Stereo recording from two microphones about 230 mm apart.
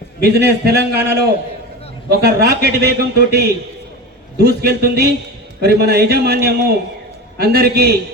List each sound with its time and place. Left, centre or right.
0.2 s a man's voice: right